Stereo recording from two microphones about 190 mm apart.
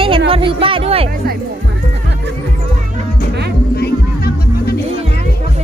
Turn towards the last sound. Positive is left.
turn(degrees=55)  # may be behind; listen again after turning